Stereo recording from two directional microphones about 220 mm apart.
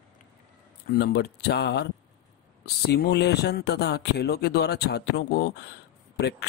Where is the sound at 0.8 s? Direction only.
45° left (ahead or behind).